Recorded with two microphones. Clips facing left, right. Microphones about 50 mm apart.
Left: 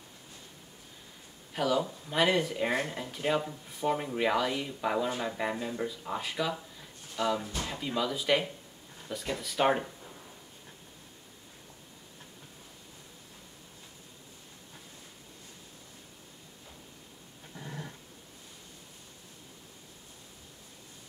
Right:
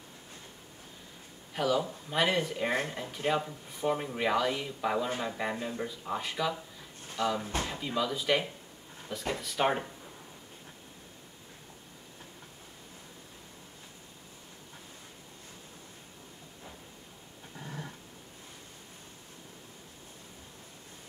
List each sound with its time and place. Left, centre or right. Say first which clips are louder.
1.5 s speech: even; centre
17.6 s dog: even; centre